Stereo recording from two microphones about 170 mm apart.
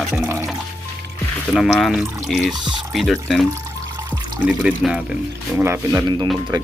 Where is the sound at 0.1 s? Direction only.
15° right (ahead or behind).